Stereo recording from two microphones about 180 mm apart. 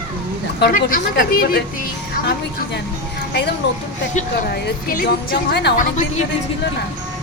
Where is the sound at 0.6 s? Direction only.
50° left (ahead or behind).